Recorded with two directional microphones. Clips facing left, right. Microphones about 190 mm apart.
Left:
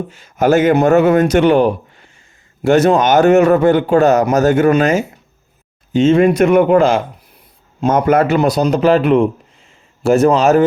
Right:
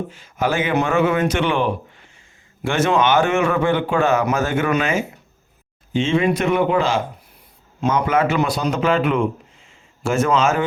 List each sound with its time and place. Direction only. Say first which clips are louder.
0.1 s a man's voice: left 12 dB; 45° left (ahead or behind)